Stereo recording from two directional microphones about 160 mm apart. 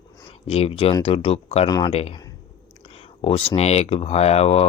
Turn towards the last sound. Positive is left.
turn(degrees=40)  # may be behind; listen again after turning